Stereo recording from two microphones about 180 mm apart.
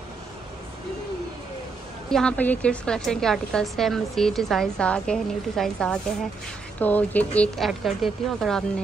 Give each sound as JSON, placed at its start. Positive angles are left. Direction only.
{"t": 2.0, "sound": "a woman's voice", "side_deg": 5}